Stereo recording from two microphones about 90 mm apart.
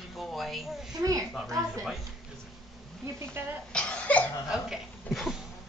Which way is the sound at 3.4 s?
25° right (ahead or behind).